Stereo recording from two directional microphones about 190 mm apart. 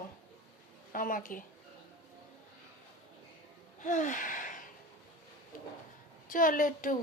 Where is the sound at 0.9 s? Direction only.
45° left (ahead or behind).